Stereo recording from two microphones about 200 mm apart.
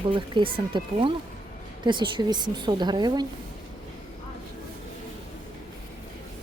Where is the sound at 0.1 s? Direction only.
25° right (ahead or behind).